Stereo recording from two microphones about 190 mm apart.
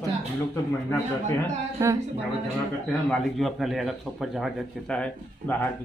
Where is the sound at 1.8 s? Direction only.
15° right (ahead or behind).